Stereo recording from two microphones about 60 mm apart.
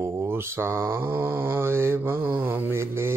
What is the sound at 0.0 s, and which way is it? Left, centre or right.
Mantra, right.